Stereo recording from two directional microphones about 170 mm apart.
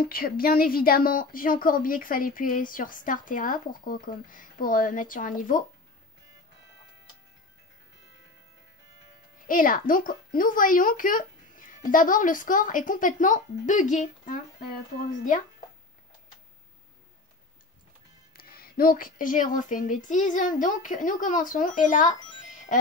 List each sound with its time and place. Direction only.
0.0 s speech: 60° left (ahead or behind)
9.5 s speech: 55° left (ahead or behind)
18.3 s speech: 60° left (ahead or behind)